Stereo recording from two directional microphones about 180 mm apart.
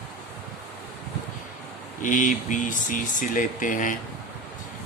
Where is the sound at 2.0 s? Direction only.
45° left (ahead or behind).